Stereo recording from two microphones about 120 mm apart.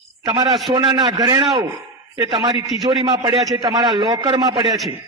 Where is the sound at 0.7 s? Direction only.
40° right (ahead or behind).